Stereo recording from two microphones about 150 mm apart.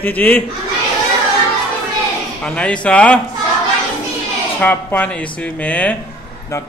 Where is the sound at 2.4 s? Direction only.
5° left (ahead or behind).